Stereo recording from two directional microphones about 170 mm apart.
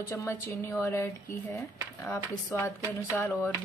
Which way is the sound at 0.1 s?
15° left (ahead or behind).